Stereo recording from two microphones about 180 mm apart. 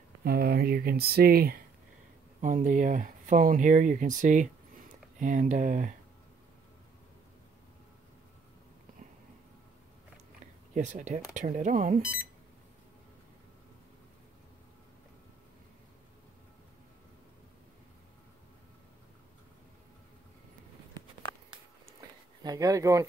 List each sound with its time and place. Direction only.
0.2 s speech: 60° right (ahead or behind)
2.4 s speech: 45° right (ahead or behind)
10.7 s speech: 45° right (ahead or behind)
22.4 s speech: 20° right (ahead or behind)